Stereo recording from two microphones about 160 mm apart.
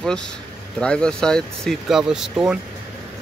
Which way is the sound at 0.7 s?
5° left (ahead or behind).